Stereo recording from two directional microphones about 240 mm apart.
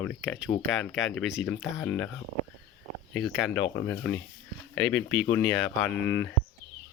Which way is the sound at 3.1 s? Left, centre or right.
Centre.